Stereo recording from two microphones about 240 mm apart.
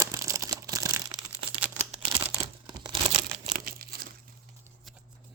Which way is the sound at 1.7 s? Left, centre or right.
Right.